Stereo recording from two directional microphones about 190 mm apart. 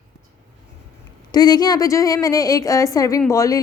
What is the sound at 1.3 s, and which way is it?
A woman's voice, 20° left (ahead or behind).